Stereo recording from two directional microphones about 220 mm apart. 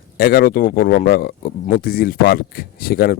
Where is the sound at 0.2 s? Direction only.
45° left (ahead or behind).